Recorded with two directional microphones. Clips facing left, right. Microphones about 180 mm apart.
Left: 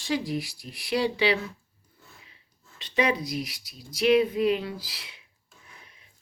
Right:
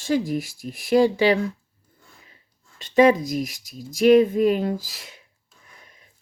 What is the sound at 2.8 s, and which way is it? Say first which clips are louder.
Speech: right 10 dB; 45° right (ahead or behind).